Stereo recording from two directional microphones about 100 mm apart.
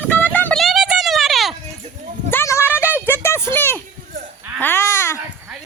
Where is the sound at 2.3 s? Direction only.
25° left (ahead or behind).